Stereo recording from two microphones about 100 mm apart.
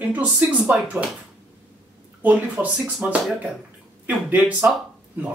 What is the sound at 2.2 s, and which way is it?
Speech, 15° right (ahead or behind).